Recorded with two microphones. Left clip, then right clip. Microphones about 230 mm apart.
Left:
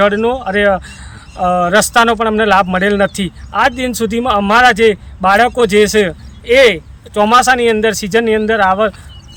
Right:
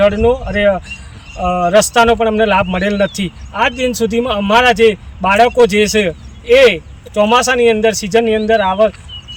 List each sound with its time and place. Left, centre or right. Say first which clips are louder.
0.0 s a man's voice: right 1 dB; centre
1.4 s speech: left 2 dB; centre
1.7 s a man's voice: right 3 dB; centre